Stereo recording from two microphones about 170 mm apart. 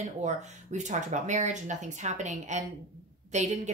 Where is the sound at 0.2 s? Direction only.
45° right (ahead or behind).